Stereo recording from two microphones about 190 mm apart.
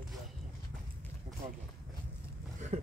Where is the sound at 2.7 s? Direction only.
35° right (ahead or behind).